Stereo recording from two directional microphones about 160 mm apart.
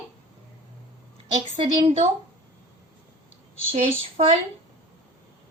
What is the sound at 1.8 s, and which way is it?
Speech, 45° right (ahead or behind).